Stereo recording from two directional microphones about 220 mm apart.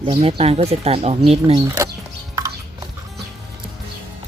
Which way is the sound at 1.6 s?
15° right (ahead or behind).